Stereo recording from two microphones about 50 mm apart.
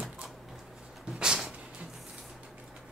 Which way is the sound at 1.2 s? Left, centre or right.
Centre.